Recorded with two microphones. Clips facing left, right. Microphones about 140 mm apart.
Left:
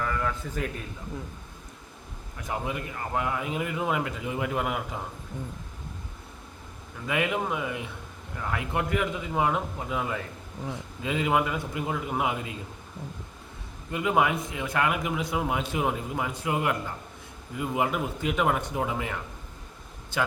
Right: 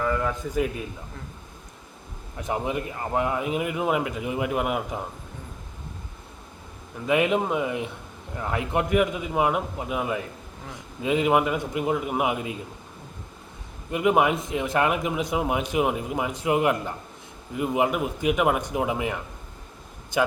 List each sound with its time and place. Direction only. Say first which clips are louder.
0.0 s speech: right 4 dB; 15° right (ahead or behind)
2.4 s speech: right 5 dB; 20° right (ahead or behind)
7.1 s a man's voice: right 6 dB; 20° right (ahead or behind)
13.9 s a man's voice: right 4 dB; 20° right (ahead or behind)
20.1 s a man's voice: right 5 dB; 15° right (ahead or behind)